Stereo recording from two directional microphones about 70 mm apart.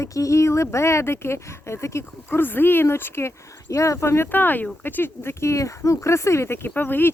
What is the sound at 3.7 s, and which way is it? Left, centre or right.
Speech, left.